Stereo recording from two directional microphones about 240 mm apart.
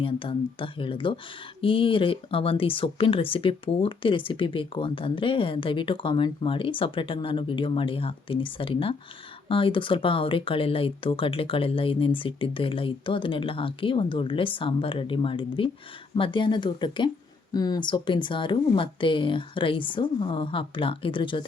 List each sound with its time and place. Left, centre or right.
0.0 s speech: left